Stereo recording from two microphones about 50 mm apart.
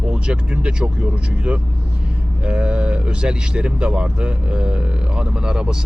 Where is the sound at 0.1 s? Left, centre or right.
Centre.